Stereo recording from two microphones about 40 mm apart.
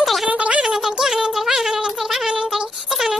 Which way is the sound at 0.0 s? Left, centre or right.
Centre.